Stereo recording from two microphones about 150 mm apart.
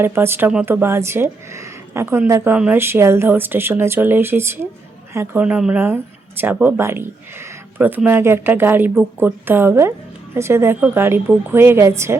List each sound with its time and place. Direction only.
0.0 s speech: 15° right (ahead or behind)